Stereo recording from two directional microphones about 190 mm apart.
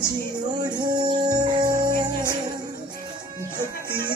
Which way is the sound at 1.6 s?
45° right (ahead or behind).